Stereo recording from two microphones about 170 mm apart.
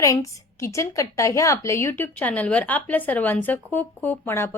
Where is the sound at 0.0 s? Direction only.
20° left (ahead or behind).